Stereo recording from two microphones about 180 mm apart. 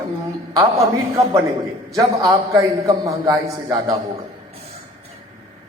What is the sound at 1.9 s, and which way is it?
A man's voice, 20° right (ahead or behind).